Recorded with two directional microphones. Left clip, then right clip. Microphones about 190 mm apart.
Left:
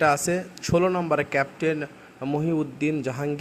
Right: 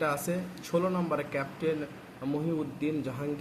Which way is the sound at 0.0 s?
50° left (ahead or behind).